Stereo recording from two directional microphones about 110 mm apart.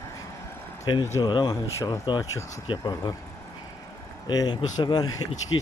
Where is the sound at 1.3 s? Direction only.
40° left (ahead or behind).